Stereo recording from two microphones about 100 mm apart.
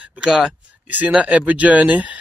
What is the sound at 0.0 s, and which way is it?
A man's voice, 10° right (ahead or behind).